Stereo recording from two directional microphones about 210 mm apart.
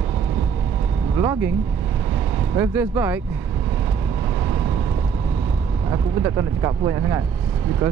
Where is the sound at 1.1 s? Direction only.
15° right (ahead or behind).